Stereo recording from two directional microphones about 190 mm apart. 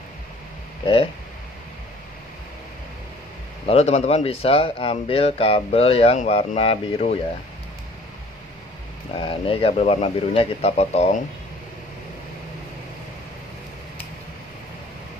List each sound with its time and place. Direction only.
3.6 s speech: 35° left (ahead or behind)
9.1 s speech: 30° left (ahead or behind)